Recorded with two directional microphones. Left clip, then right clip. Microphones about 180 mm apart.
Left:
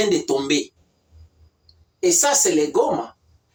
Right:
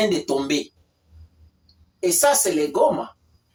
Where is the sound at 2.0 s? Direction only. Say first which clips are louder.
Left 1 dB; 15° right (ahead or behind).